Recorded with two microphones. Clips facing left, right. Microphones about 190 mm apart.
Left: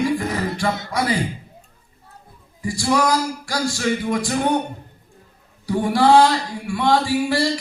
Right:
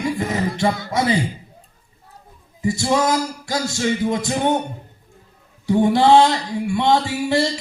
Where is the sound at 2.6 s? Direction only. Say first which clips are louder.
Right 1 dB; 20° right (ahead or behind).